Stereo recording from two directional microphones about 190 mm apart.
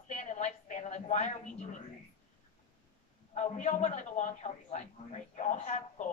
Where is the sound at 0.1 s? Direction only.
40° left (ahead or behind).